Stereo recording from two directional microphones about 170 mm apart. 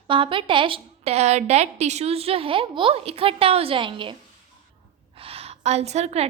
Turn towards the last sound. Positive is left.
turn(degrees=-40)  # may be behind; listen again after turning